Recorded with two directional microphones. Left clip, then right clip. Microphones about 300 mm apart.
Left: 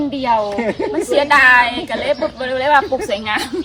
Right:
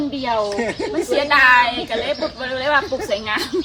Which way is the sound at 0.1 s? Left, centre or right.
Left.